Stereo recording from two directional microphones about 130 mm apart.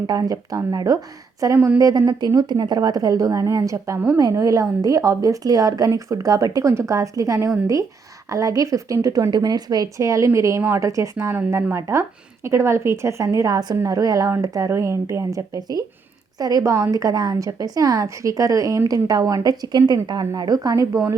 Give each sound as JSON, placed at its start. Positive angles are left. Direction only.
{"t": 0.1, "sound": "a woman's voice", "side_deg": -30}
{"t": 1.5, "sound": "a woman's voice", "side_deg": -15}
{"t": 1.8, "sound": "a woman's voice", "side_deg": -30}